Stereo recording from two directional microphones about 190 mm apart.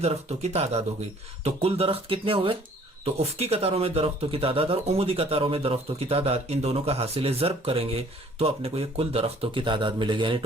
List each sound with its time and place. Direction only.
0.0 s speech: 35° right (ahead or behind)